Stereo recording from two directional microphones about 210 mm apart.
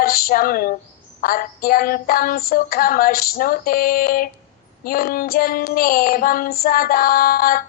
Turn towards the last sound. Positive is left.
turn(degrees=45)  # may be behind; listen again after turning